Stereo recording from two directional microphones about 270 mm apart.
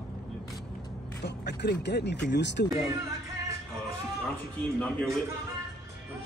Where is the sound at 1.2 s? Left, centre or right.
Left.